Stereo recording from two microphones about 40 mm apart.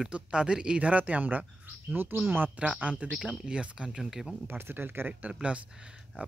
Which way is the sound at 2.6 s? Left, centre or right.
Right.